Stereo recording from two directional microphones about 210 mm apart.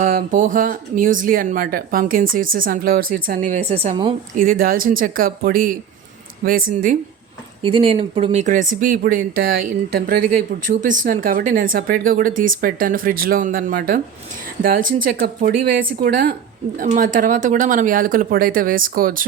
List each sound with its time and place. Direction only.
0.0 s speech: 40° right (ahead or behind)
3.7 s speech: 25° right (ahead or behind)
4.4 s speech: 40° right (ahead or behind)
7.6 s speech: 25° right (ahead or behind); by 19.2 s 40° right (ahead or behind)